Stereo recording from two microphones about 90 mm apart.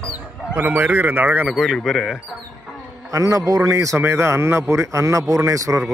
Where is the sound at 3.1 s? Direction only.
35° right (ahead or behind).